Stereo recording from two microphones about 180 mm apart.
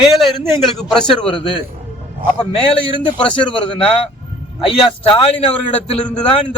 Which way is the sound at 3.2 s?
5° left (ahead or behind).